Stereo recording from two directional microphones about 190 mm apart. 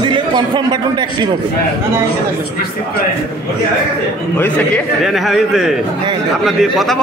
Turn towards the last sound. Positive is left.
turn(degrees=0)  # may be behind; listen again after turning